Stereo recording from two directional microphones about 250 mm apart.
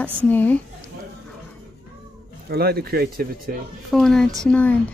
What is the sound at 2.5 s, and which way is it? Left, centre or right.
Speech, right.